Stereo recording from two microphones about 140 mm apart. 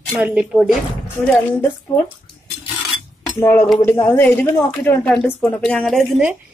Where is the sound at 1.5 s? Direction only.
15° left (ahead or behind).